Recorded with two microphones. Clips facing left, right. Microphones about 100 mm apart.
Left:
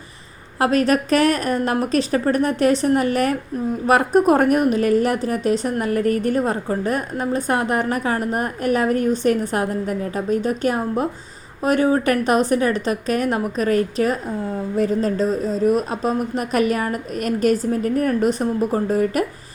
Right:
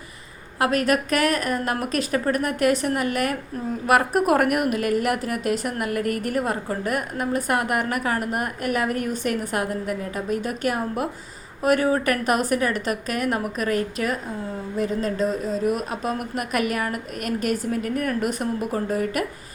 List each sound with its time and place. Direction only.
0.6 s a woman's voice: 30° left (ahead or behind)